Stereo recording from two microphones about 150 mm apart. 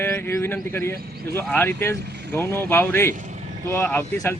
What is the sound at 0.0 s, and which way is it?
Speech, 15° left (ahead or behind).